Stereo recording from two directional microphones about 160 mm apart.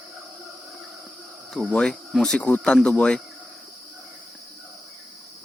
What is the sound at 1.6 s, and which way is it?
Speech, 5° left (ahead or behind).